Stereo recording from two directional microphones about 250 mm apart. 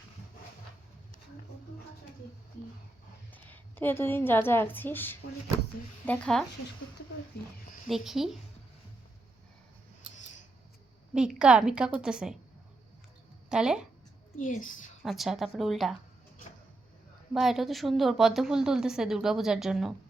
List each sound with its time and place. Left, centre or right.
3.3 s a woman's voice: centre
7.9 s a woman's voice: centre
11.1 s a woman's voice: centre
13.5 s a woman's voice: centre
14.3 s a woman's voice: left
15.0 s a woman's voice: centre
17.4 s a woman's voice: centre